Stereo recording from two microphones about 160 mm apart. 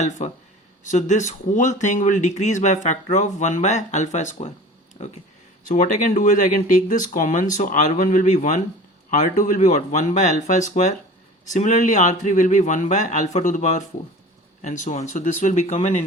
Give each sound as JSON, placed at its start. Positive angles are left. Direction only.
{"t": 0.2, "sound": "speech", "side_deg": 45}
{"t": 5.6, "sound": "speech", "side_deg": 55}